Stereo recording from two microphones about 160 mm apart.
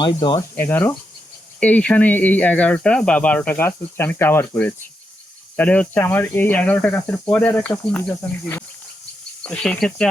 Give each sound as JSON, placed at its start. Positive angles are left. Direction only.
{"t": 0.0, "sound": "speech", "side_deg": 30}
{"t": 0.5, "sound": "speech", "side_deg": 15}